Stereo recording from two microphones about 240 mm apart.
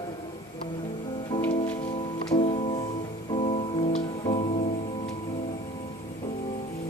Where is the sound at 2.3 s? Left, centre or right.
Left.